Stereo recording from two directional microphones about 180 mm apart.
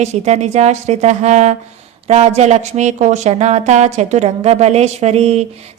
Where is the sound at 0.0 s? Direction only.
40° right (ahead or behind).